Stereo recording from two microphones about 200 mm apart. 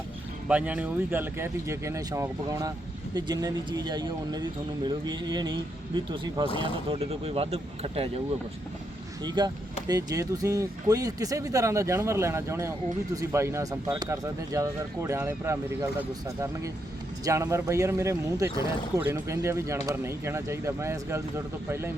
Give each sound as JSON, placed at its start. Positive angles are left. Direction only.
{"t": 0.4, "sound": "speech", "side_deg": -5}
{"t": 9.2, "sound": "speech", "side_deg": -20}